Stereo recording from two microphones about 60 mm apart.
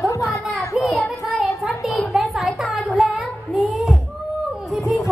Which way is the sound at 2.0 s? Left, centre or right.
Centre.